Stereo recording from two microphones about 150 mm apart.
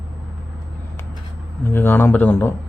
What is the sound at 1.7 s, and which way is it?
Speech, 15° left (ahead or behind).